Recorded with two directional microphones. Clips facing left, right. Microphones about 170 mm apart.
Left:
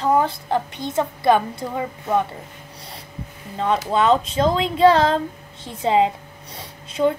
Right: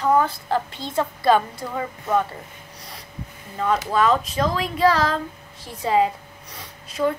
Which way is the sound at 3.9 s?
25° left (ahead or behind).